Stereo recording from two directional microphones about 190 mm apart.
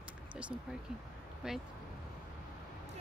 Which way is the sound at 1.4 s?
5° right (ahead or behind).